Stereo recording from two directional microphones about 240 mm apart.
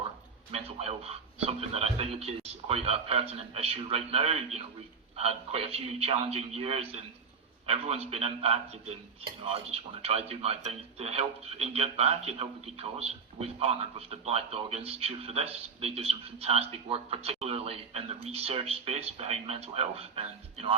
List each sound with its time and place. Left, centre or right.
0.5 s a man's voice: right